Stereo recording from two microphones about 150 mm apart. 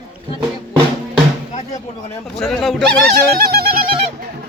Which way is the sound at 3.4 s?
90° right.